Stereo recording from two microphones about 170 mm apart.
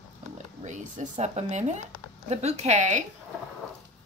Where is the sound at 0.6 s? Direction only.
45° right (ahead or behind).